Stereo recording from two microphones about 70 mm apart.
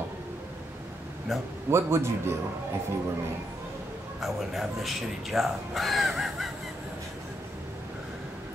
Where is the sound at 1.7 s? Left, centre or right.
Right.